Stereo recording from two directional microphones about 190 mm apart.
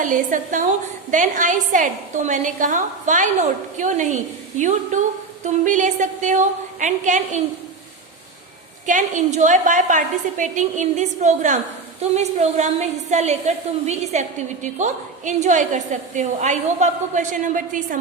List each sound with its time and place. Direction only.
0.0 s a woman's voice: 45° right (ahead or behind)
8.9 s a woman's voice: 40° right (ahead or behind)